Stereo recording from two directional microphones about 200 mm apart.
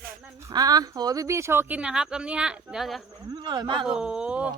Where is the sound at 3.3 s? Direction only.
20° right (ahead or behind).